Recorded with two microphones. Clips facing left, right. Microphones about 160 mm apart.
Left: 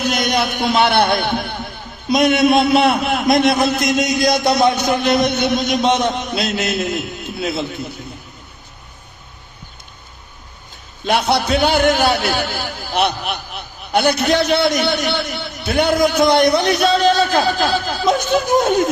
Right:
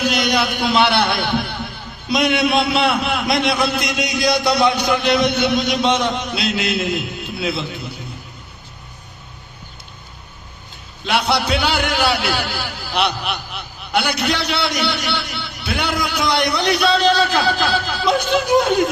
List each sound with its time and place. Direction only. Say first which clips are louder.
0.0 s a man's voice: even; 50° left (ahead or behind)
11.0 s a man's voice: left 2 dB; 45° left (ahead or behind)